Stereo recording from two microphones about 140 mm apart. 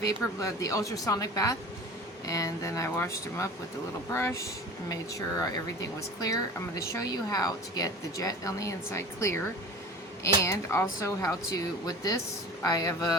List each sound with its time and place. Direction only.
0.0 s speech: 25° left (ahead or behind)
5.6 s speech: 25° left (ahead or behind)
10.4 s speech: 20° left (ahead or behind)